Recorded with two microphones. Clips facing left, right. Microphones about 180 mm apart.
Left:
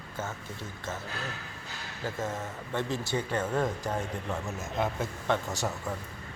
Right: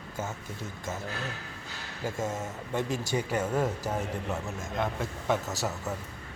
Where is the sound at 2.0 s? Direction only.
10° right (ahead or behind).